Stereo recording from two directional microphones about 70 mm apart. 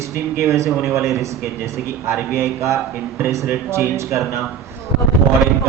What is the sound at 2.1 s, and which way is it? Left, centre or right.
Speech, right.